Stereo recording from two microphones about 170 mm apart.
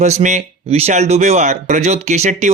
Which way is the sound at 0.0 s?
45° right (ahead or behind).